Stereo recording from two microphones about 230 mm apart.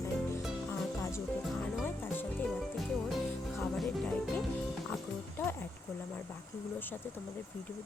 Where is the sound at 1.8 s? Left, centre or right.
Centre.